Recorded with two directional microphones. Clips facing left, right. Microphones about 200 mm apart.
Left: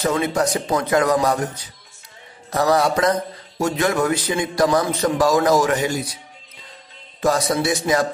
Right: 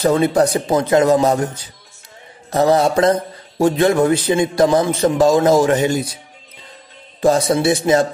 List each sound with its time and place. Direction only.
0.0 s speech: 35° right (ahead or behind)
7.2 s speech: 30° right (ahead or behind)